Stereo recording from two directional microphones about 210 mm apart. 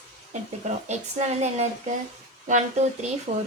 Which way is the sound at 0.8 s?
35° right (ahead or behind).